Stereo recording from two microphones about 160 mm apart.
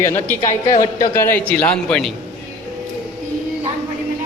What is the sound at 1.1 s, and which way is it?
A man's voice, 15° left (ahead or behind).